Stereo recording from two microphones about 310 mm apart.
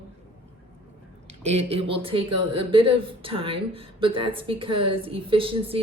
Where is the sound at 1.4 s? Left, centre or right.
Centre.